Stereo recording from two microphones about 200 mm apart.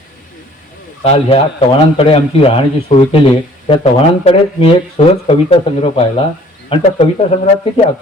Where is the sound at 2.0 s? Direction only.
30° left (ahead or behind).